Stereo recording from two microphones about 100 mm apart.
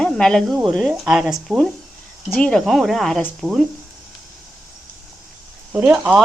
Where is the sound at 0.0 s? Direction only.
5° left (ahead or behind).